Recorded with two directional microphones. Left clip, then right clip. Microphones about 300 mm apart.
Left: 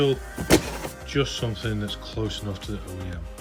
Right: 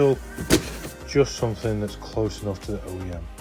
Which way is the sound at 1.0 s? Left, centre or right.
Right.